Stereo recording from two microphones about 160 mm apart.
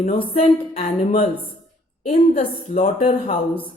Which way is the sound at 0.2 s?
40° left (ahead or behind).